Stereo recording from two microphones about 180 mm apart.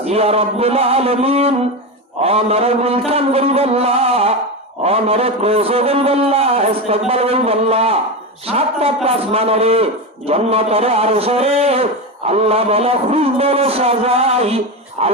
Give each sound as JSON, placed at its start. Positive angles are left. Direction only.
{"t": 0.0, "sound": "a man's voice", "side_deg": -35}